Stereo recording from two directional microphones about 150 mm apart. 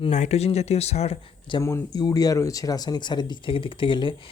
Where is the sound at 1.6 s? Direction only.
20° left (ahead or behind).